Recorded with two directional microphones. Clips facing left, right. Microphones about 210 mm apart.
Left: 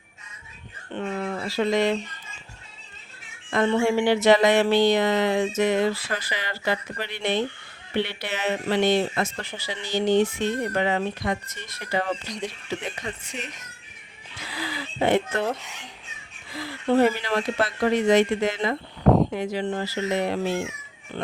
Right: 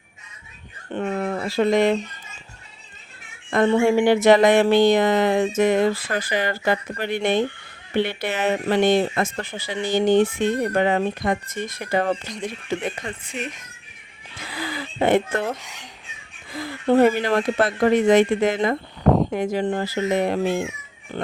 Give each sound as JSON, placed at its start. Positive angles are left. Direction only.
{"t": 0.9, "sound": "speech", "side_deg": -50}
{"t": 3.5, "sound": "speech", "side_deg": -45}
{"t": 14.4, "sound": "a sound", "side_deg": -50}
{"t": 15.4, "sound": "speech", "side_deg": 0}
{"t": 16.5, "sound": "speech", "side_deg": -50}